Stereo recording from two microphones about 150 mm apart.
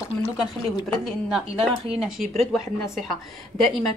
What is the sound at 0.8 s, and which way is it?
Speech, centre (ahead or behind).